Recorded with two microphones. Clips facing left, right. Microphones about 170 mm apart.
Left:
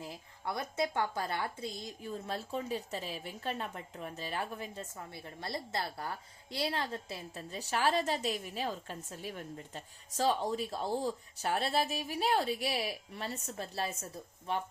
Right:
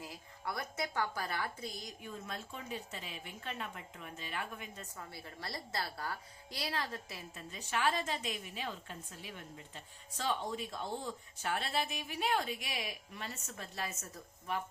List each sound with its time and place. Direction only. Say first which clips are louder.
0.0 s speech: left 3 dB; 25° left (ahead or behind)